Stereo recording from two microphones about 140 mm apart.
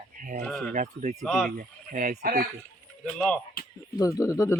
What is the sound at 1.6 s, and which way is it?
Speech, 75° right (ahead or behind).